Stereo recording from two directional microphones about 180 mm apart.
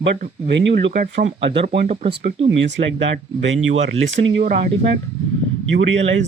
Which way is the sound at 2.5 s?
85° right.